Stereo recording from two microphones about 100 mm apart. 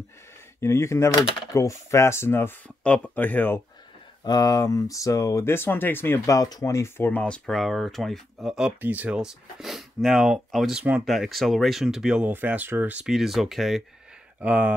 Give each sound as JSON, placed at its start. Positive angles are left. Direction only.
{"t": 0.6, "sound": "speech", "side_deg": 25}
{"t": 4.2, "sound": "speech", "side_deg": 40}
{"t": 7.1, "sound": "speech", "side_deg": 10}
{"t": 9.2, "sound": "speech", "side_deg": -5}
{"t": 10.8, "sound": "speech", "side_deg": -15}
{"t": 11.1, "sound": "speech", "side_deg": 0}
{"t": 12.3, "sound": "speech", "side_deg": -20}
{"t": 13.0, "sound": "speech", "side_deg": -5}
{"t": 14.4, "sound": "speech", "side_deg": -15}